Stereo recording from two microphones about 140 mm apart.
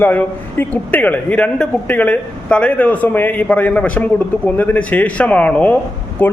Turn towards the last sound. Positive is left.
turn(degrees=15)  # may be behind; listen again after turning